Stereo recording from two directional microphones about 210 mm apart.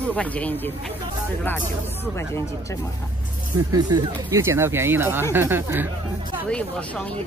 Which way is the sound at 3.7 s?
20° right (ahead or behind).